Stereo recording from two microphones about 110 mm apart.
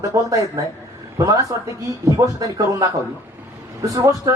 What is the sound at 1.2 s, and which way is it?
Speech, 30° right (ahead or behind).